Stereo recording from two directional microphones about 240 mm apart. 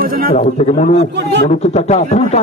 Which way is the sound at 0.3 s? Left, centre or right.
Left.